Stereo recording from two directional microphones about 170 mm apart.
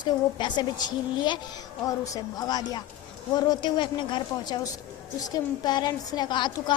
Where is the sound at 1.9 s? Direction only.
20° left (ahead or behind).